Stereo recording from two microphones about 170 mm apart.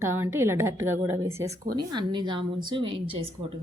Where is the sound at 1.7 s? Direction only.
25° right (ahead or behind).